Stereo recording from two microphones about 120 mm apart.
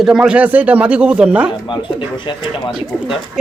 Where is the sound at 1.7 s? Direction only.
40° left (ahead or behind).